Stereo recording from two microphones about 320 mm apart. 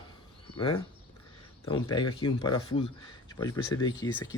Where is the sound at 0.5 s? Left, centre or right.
Centre.